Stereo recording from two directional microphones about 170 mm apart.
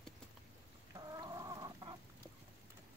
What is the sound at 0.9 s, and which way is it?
Chicken, 25° right (ahead or behind).